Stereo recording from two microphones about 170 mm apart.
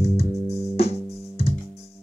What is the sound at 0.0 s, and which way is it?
Music, 35° left (ahead or behind).